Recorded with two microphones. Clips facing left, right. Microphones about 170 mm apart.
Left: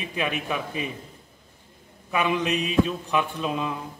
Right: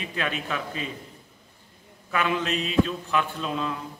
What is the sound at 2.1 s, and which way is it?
A man's voice, 15° left (ahead or behind).